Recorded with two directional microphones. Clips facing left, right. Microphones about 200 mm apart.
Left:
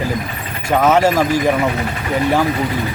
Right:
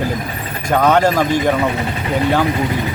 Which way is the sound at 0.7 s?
5° left (ahead or behind).